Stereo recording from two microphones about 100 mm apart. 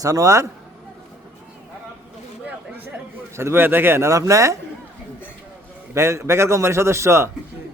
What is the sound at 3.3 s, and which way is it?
A man's voice, 25° right (ahead or behind).